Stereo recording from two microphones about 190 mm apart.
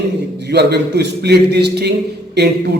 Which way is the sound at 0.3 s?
60° right (ahead or behind).